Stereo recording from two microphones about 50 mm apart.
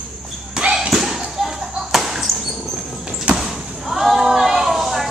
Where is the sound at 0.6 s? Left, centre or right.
Centre.